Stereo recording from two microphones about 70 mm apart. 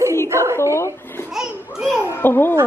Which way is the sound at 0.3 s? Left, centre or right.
Right.